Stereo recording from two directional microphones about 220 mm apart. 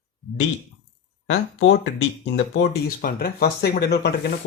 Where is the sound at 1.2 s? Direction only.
60° left (ahead or behind).